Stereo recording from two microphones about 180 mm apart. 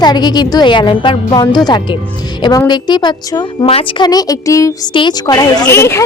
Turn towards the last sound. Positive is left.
turn(degrees=15)  # may be behind; listen again after turning